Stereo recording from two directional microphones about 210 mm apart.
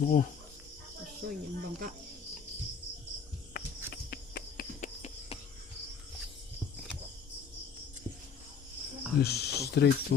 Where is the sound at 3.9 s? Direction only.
50° left (ahead or behind).